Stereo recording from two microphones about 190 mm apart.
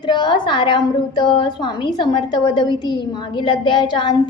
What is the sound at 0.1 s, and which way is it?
A woman's voice, 25° left (ahead or behind).